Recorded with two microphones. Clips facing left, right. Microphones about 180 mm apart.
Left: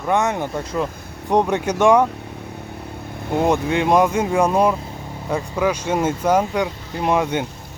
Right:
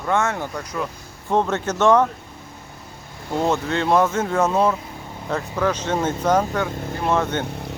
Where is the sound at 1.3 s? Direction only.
15° left (ahead or behind).